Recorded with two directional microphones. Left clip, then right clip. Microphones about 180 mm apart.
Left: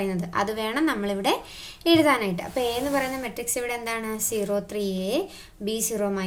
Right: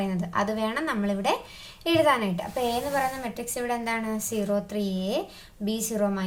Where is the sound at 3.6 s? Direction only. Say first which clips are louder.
Right 1 dB; 30° left (ahead or behind).